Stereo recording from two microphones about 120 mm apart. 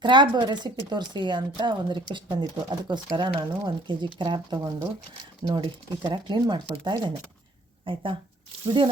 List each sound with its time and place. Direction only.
0.0 s speech: 40° right (ahead or behind)